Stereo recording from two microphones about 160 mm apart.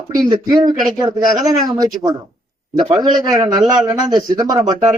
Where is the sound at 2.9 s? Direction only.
25° right (ahead or behind).